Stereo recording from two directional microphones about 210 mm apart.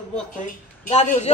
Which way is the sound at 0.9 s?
35° left (ahead or behind).